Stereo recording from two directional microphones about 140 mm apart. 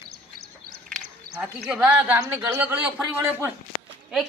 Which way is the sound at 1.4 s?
10° right (ahead or behind).